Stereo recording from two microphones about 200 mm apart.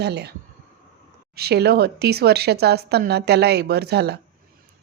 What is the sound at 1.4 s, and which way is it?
A woman's voice, 55° right (ahead or behind).